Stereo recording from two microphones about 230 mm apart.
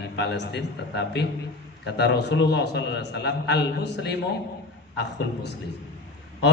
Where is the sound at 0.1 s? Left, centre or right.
Left.